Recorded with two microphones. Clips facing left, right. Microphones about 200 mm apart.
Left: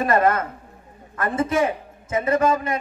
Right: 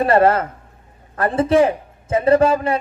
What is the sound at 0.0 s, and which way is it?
A man's voice, 30° right (ahead or behind).